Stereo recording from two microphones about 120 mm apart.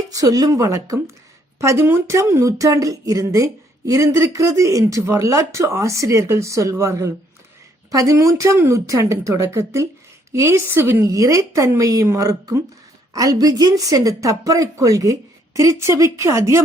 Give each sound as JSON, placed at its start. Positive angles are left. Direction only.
{"t": 0.1, "sound": "speech", "side_deg": -30}